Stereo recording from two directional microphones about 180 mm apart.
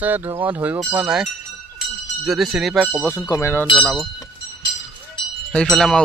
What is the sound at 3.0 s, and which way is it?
Speech, 10° left (ahead or behind).